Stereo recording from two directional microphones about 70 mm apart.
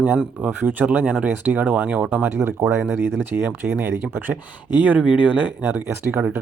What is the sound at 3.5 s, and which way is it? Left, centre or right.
Speech, centre.